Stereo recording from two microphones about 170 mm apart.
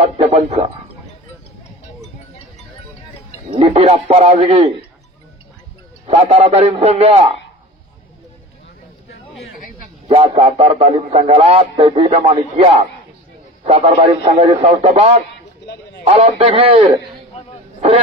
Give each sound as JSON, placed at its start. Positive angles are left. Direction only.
{"t": 0.0, "sound": "a man's voice", "side_deg": -40}
{"t": 3.5, "sound": "speech", "side_deg": -35}
{"t": 6.0, "sound": "speech", "side_deg": -35}
{"t": 10.0, "sound": "speech", "side_deg": -35}
{"t": 14.4, "sound": "speech", "side_deg": -35}
{"t": 17.7, "sound": "a sound", "side_deg": -40}